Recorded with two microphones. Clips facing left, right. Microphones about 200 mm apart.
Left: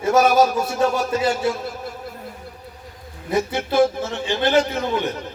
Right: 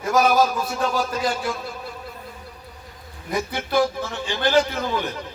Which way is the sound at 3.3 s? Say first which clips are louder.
Left 4 dB; 25° left (ahead or behind).